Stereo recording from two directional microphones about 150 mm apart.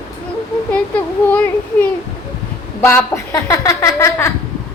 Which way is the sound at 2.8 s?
15° left (ahead or behind).